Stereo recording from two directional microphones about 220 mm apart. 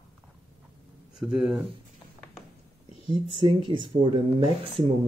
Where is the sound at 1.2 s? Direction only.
5° right (ahead or behind).